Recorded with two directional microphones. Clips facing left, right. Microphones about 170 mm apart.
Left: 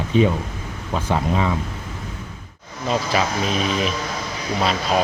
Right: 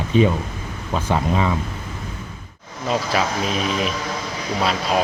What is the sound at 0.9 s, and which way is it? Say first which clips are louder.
Speech: right 1 dB; 20° right (ahead or behind).